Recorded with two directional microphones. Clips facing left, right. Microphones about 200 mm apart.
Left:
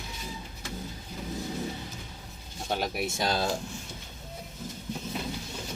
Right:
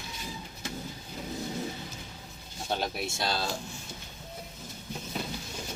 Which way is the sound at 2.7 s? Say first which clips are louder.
Left 2 dB; 10° left (ahead or behind).